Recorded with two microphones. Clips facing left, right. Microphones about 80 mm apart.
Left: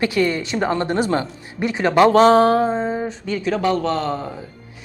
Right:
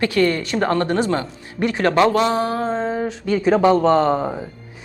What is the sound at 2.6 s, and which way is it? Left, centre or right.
Speech, centre.